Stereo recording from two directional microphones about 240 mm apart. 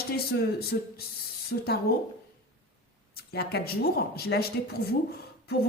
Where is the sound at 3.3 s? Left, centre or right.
Left.